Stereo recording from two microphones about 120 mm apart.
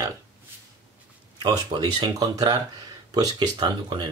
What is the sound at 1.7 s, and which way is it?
Speech, 45° right (ahead or behind).